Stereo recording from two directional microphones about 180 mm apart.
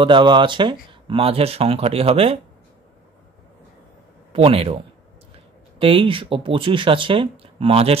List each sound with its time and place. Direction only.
0.0 s speech: 25° right (ahead or behind)
4.3 s speech: 30° right (ahead or behind)